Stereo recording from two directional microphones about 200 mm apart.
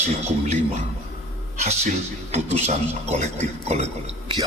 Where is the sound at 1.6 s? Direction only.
35° right (ahead or behind).